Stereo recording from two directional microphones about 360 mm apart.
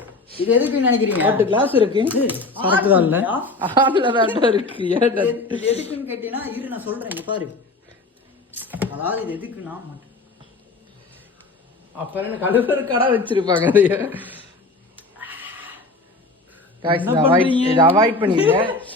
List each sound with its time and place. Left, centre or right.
0.5 s speech: centre
5.6 s a woman's voice: centre
6.1 s speech: centre
8.5 s speech: centre
12.1 s speech: centre
14.9 s cat: centre
17.1 s speech: centre